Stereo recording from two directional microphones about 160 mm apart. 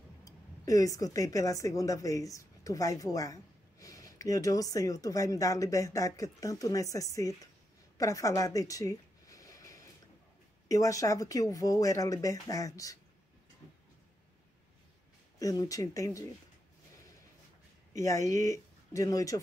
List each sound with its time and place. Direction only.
0.2 s speech: 20° left (ahead or behind)
8.0 s a sound: 20° left (ahead or behind)
10.7 s speech: 20° left (ahead or behind)
15.3 s speech: 20° left (ahead or behind)
17.9 s speech: 20° left (ahead or behind)